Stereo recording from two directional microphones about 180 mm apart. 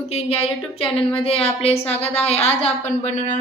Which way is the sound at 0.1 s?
35° left (ahead or behind).